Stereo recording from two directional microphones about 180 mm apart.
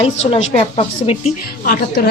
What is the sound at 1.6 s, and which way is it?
Speech, 50° left (ahead or behind).